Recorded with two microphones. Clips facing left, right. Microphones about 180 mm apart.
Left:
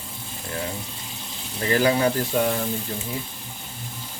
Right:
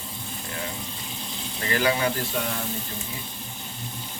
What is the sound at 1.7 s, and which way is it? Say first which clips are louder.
Speech: left 4 dB; 35° left (ahead or behind).